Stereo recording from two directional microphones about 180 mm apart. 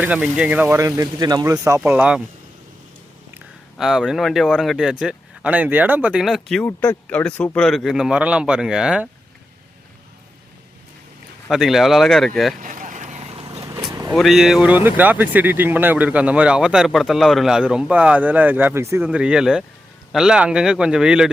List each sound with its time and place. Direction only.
0.0 s speech: 10° right (ahead or behind)
3.3 s speech: centre (ahead or behind)
11.4 s speech: centre (ahead or behind)
12.5 s vehicle: 45° right (ahead or behind)
13.9 s vehicle: 20° right (ahead or behind)
14.2 s speech: centre (ahead or behind)